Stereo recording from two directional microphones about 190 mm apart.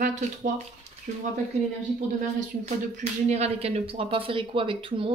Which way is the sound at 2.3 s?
35° right (ahead or behind).